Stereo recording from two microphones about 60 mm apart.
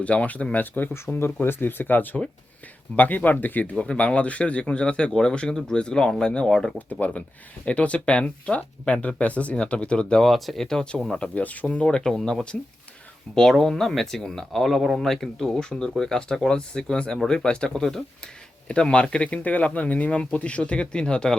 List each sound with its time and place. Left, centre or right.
0.0 s speech: left
0.9 s speech: left; by 10.2 s centre
10.2 s speech: centre
11.2 s speech: left